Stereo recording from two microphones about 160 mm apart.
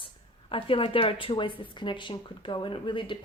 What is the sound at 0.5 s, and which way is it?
A woman's voice, 35° left (ahead or behind).